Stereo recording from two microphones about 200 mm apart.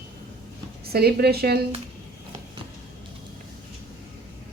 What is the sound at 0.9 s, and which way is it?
Speech, 50° right (ahead or behind).